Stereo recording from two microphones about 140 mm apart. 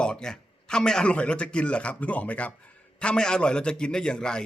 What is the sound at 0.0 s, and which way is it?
A man's voice, 5° left (ahead or behind).